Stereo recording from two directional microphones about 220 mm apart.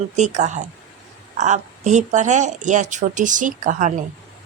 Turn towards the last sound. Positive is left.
turn(degrees=-35)  # may be behind; listen again after turning